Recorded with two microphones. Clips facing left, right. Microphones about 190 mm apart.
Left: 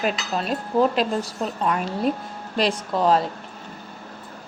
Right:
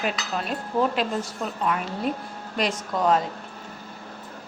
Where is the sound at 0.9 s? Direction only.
35° left (ahead or behind).